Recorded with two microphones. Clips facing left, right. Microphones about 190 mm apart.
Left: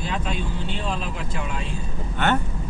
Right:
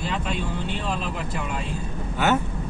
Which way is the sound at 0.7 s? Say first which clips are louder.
Even; 55° right (ahead or behind).